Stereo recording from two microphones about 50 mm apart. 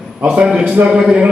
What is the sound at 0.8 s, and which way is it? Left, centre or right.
Speech, centre.